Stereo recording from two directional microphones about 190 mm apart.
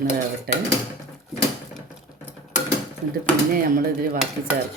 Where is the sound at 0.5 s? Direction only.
55° right (ahead or behind).